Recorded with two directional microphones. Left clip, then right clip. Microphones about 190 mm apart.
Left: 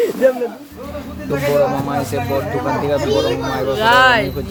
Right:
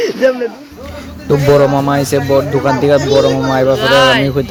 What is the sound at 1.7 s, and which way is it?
Speech, 40° right (ahead or behind).